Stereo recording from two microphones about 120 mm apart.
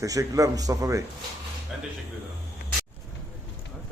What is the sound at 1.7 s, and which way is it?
Speech, 5° right (ahead or behind).